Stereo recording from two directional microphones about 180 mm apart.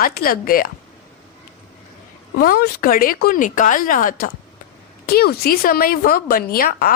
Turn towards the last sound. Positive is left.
turn(degrees=55)  # may be behind; listen again after turning